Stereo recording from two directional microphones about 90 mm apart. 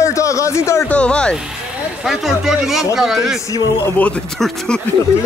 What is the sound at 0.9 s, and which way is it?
Speech, 10° left (ahead or behind).